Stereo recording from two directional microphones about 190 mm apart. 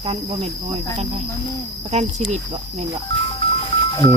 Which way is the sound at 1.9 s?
35° right (ahead or behind).